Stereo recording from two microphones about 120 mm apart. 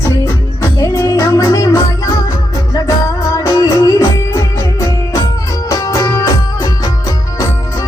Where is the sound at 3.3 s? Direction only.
30° left (ahead or behind).